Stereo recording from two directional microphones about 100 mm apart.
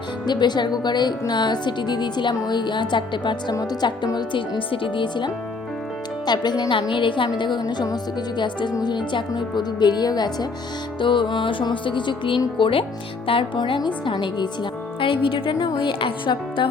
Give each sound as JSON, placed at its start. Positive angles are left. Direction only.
{"t": 0.3, "sound": "a woman's voice", "side_deg": 45}
{"t": 3.5, "sound": "a woman's voice", "side_deg": 40}
{"t": 7.6, "sound": "music", "side_deg": 40}
{"t": 8.7, "sound": "a woman's voice", "side_deg": 45}
{"t": 11.0, "sound": "music", "side_deg": 55}
{"t": 13.6, "sound": "a woman's voice", "side_deg": 50}
{"t": 15.6, "sound": "music", "side_deg": 55}